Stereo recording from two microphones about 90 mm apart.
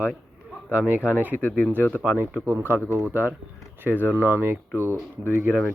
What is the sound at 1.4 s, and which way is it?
Speech, 15° left (ahead or behind).